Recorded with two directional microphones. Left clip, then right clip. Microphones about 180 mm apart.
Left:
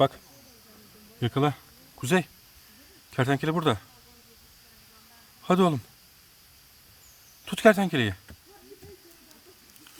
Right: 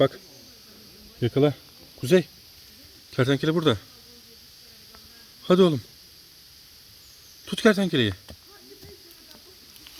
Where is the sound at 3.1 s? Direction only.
5° left (ahead or behind).